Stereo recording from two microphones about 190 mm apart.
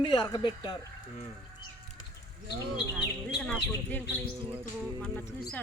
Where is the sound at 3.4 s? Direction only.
5° left (ahead or behind).